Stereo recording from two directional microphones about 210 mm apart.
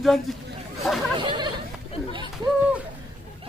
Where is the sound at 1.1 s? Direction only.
20° right (ahead or behind).